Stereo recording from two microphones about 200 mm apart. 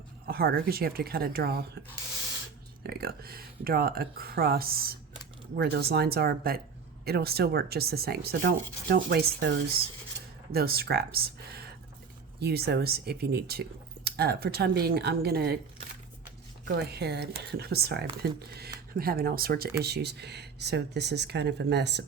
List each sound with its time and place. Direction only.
0.3 s speech: 50° right (ahead or behind)
2.8 s speech: 50° right (ahead or behind)
10.5 s speech: 50° right (ahead or behind)
16.6 s speech: 55° right (ahead or behind)